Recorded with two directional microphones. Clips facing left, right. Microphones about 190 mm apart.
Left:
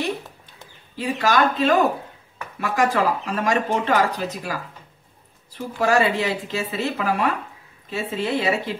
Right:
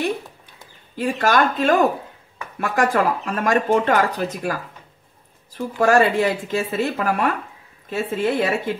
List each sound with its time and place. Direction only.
0.9 s speech: 50° right (ahead or behind)
5.8 s speech: 50° right (ahead or behind)